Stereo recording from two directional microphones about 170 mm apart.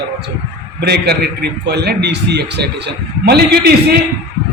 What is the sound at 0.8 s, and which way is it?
A man's voice, 75° right (ahead or behind).